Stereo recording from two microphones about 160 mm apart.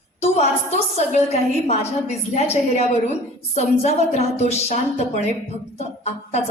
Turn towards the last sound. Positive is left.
turn(degrees=45)  # may be behind; listen again after turning